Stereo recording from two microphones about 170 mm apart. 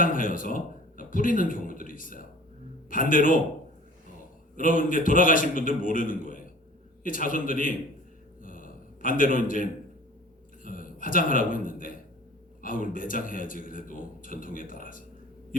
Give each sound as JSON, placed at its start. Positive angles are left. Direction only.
{"t": 0.0, "sound": "a man's voice", "side_deg": 55}
{"t": 4.5, "sound": "a man's voice", "side_deg": 55}
{"t": 8.4, "sound": "a sound", "side_deg": 55}
{"t": 10.6, "sound": "a man's voice", "side_deg": 55}